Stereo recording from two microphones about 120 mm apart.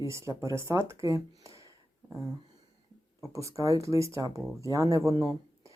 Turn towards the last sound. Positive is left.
turn(degrees=-30)  # may be behind; listen again after turning